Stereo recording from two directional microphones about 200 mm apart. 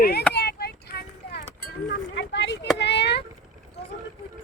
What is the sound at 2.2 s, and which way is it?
Speech, 60° left (ahead or behind).